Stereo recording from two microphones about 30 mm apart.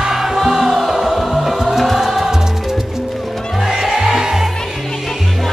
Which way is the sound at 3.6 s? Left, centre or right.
Centre.